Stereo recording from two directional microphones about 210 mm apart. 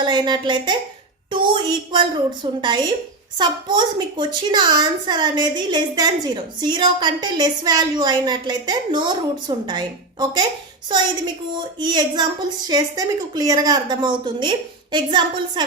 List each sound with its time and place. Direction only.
0.0 s a woman's voice: 20° right (ahead or behind)
1.9 s a woman's voice: 20° right (ahead or behind)
11.5 s a woman's voice: 20° right (ahead or behind)